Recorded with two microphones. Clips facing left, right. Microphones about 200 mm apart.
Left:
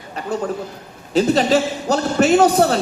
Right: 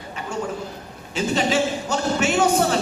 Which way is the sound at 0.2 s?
35° left (ahead or behind).